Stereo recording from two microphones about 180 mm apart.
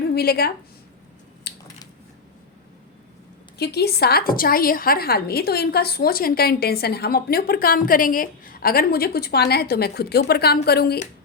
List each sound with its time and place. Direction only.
0.1 s a woman's voice: 60° left (ahead or behind)
1.5 s a sound: 65° left (ahead or behind)
3.6 s a woman's voice: 65° left (ahead or behind)